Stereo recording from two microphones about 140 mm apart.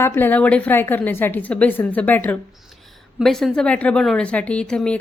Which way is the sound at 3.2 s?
Centre (ahead or behind).